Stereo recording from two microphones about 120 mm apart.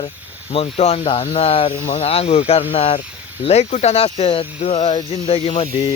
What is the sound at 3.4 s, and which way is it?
Speech, 65° left (ahead or behind).